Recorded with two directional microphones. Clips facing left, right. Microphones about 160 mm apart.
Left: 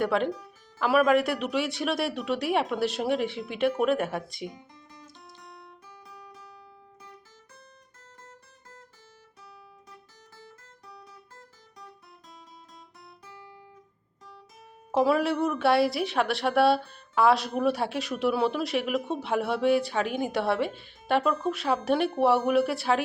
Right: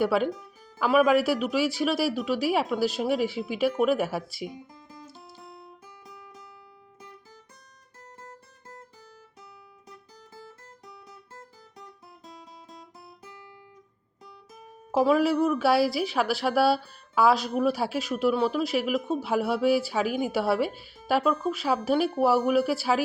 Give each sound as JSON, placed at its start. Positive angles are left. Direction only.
{"t": 0.0, "sound": "a woman's voice", "side_deg": -5}
{"t": 5.2, "sound": "guitar", "side_deg": -30}
{"t": 14.9, "sound": "a woman's voice", "side_deg": 0}